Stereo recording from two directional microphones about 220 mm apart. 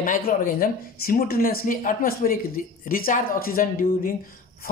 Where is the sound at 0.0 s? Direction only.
40° left (ahead or behind).